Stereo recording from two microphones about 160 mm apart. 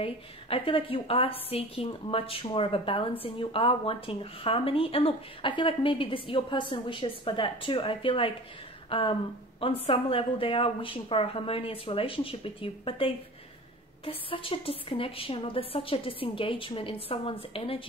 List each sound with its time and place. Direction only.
0.0 s a woman's voice: 35° left (ahead or behind)